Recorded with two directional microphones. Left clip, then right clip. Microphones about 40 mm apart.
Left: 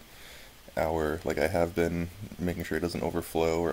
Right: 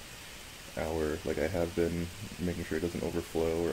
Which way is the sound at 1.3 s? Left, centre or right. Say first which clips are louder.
Left 7 dB; left.